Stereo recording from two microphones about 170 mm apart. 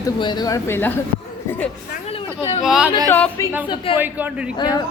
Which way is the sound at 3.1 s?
10° left (ahead or behind).